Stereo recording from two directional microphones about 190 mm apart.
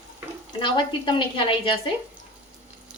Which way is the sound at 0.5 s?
25° left (ahead or behind).